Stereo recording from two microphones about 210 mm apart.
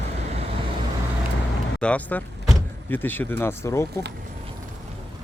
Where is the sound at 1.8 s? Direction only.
5° left (ahead or behind).